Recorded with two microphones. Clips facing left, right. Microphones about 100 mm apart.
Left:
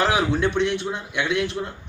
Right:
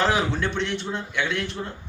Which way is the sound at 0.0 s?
15° left (ahead or behind).